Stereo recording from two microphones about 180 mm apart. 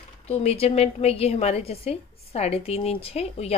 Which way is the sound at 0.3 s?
35° left (ahead or behind).